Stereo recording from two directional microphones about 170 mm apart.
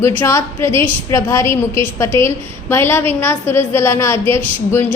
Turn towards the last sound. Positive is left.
turn(degrees=15)  # may be behind; listen again after turning